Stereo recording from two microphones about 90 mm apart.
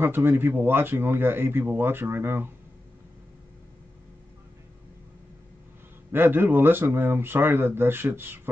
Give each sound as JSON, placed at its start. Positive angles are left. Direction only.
{"t": 0.0, "sound": "speech", "side_deg": -25}
{"t": 6.1, "sound": "speech", "side_deg": -25}